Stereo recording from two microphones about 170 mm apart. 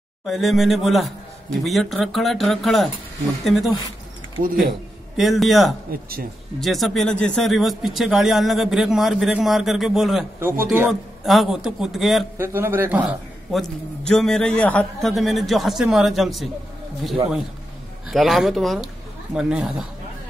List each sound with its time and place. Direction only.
0.3 s a man's voice: centre (ahead or behind)
4.4 s speech: 60° right (ahead or behind)
5.1 s a man's voice: centre (ahead or behind)
5.9 s speech: 60° right (ahead or behind)
6.6 s a man's voice: centre (ahead or behind)
10.4 s speech: 10° right (ahead or behind)
10.9 s a man's voice: centre (ahead or behind)
12.4 s a man's voice: 15° right (ahead or behind)
18.1 s a man's voice: centre (ahead or behind)